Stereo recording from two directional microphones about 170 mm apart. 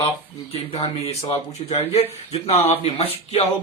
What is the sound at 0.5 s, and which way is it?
Speech, 35° left (ahead or behind).